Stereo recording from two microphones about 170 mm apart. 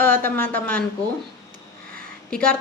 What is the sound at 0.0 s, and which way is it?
Speech, 15° left (ahead or behind).